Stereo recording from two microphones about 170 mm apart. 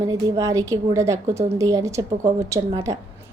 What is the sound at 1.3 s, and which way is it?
Speech, 40° right (ahead or behind).